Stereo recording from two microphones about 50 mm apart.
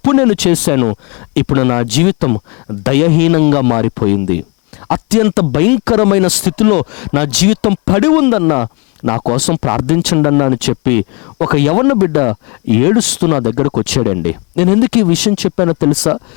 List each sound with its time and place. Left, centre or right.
0.0 s speech: centre